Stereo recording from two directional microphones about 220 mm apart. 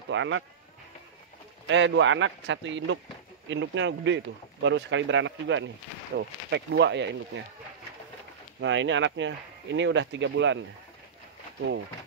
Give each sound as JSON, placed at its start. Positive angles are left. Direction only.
{"t": 0.1, "sound": "speech", "side_deg": -55}
{"t": 1.7, "sound": "speech", "side_deg": -55}
{"t": 8.5, "sound": "speech", "side_deg": -60}